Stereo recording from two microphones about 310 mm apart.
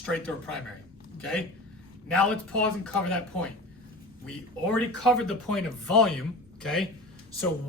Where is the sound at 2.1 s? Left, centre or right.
Centre.